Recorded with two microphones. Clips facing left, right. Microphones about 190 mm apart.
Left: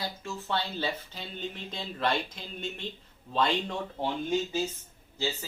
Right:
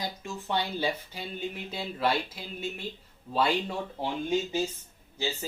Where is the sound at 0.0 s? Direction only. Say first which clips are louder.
Right 1 dB; 15° right (ahead or behind).